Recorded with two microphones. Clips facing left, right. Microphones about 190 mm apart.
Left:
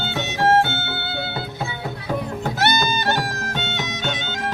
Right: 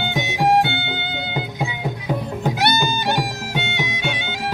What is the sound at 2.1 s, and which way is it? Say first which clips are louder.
Music: right 1 dB; 15° right (ahead or behind).